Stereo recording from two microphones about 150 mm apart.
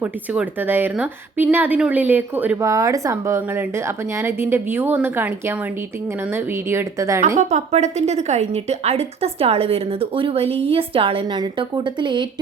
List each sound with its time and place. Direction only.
0.0 s speech: 10° right (ahead or behind)
7.3 s a woman's voice: 50° right (ahead or behind); by 12.2 s 30° right (ahead or behind)